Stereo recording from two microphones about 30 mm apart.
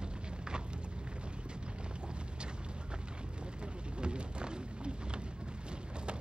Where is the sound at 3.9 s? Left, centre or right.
Right.